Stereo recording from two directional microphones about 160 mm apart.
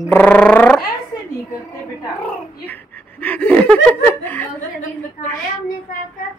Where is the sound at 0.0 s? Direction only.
10° left (ahead or behind).